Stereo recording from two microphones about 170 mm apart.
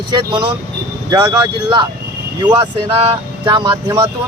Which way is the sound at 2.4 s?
25° right (ahead or behind).